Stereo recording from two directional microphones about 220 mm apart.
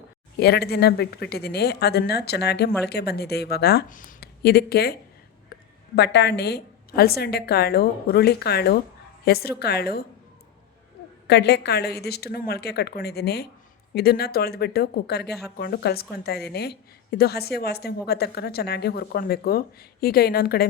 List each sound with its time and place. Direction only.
0.3 s a woman's voice: 45° left (ahead or behind)
6.0 s a woman's voice: 50° left (ahead or behind)
11.3 s a woman's voice: 50° left (ahead or behind)